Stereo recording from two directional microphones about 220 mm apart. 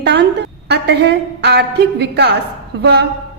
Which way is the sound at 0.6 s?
50° right (ahead or behind).